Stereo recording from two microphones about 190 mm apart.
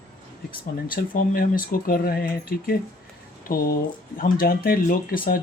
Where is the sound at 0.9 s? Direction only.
50° left (ahead or behind).